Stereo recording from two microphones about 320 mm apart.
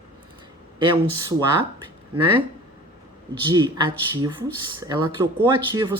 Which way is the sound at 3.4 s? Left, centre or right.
Centre.